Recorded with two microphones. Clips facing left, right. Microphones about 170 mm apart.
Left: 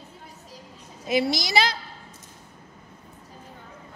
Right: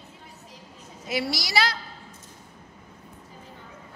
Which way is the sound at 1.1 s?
20° left (ahead or behind).